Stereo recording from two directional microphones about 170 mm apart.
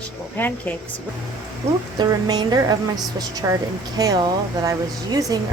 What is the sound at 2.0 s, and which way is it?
A woman's voice, 25° right (ahead or behind).